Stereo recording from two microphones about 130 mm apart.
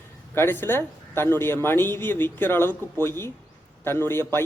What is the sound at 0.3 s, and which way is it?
A man's voice, 15° left (ahead or behind).